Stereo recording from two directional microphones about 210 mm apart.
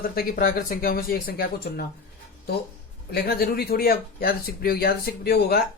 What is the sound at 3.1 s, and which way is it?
Speech, 50° left (ahead or behind).